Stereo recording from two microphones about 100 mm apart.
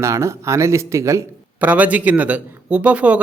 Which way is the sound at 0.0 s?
30° right (ahead or behind).